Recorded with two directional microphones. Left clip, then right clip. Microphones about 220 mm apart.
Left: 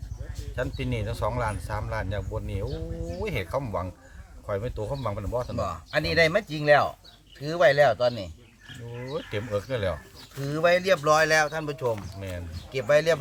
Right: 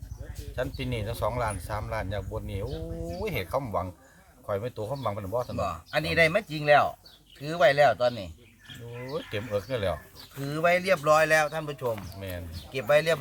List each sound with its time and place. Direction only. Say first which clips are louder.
0.5 s speech: left 1 dB; centre (ahead or behind)
5.5 s speech: left 1 dB; 15° left (ahead or behind)
9.0 s speech: left 1 dB; centre (ahead or behind)
10.4 s speech: left 2 dB; 15° left (ahead or behind)
11.9 s speech: left 1 dB; 5° right (ahead or behind)
12.7 s speech: left 2 dB; 15° left (ahead or behind)